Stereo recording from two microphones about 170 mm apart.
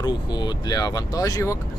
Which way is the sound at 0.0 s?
25° left (ahead or behind).